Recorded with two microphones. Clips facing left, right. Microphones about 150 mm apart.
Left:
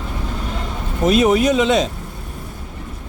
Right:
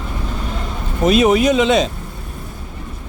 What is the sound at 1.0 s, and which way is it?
Speech, 90° right.